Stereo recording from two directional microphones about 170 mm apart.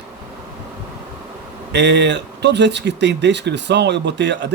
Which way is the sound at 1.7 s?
90° right.